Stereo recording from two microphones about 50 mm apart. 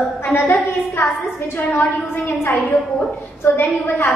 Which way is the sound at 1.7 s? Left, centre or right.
Left.